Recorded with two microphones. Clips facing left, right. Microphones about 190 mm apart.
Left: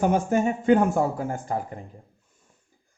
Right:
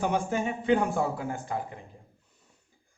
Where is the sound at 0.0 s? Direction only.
45° left (ahead or behind).